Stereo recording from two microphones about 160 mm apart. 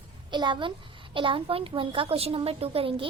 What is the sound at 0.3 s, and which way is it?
A child's voice, 30° right (ahead or behind).